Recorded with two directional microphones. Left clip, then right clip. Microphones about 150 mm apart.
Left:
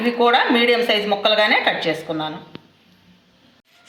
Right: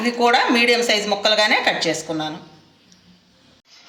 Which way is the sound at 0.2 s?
5° left (ahead or behind).